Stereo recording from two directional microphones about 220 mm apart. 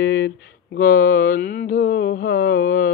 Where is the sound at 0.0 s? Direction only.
45° left (ahead or behind).